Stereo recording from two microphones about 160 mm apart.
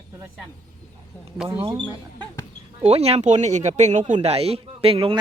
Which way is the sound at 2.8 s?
40° right (ahead or behind).